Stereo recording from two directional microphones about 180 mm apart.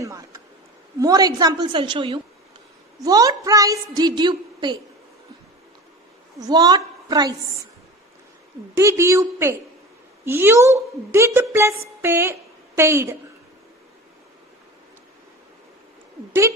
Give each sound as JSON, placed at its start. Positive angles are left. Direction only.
{"t": 0.0, "sound": "a woman's voice", "side_deg": -15}
{"t": 6.4, "sound": "a woman's voice", "side_deg": -20}
{"t": 8.7, "sound": "a woman's voice", "side_deg": -15}